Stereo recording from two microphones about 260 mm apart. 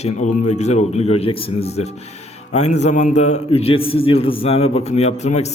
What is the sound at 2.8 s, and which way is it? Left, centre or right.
A man's voice, left.